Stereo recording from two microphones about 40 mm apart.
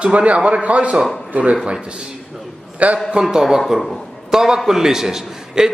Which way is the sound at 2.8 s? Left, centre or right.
Right.